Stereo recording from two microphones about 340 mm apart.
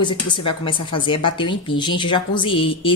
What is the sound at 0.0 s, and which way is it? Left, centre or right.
A woman's voice, centre.